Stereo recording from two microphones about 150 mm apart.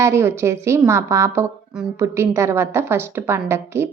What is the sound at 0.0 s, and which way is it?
A woman's voice, 20° right (ahead or behind).